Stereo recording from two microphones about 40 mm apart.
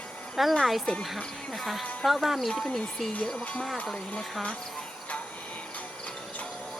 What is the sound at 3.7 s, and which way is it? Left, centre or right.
Speech, left.